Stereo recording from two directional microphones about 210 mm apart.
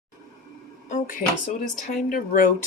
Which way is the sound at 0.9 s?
40° left (ahead or behind).